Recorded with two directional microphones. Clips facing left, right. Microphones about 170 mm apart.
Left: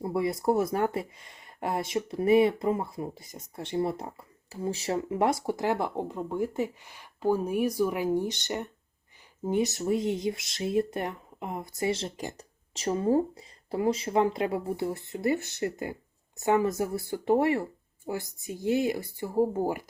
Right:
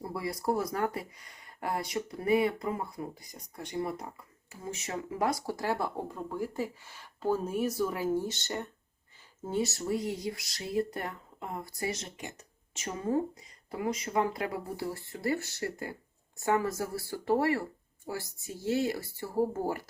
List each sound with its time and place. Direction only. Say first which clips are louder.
0.0 s speech: left 6 dB; 20° left (ahead or behind)